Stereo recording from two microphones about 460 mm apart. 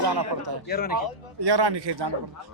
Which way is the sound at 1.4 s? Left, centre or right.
Right.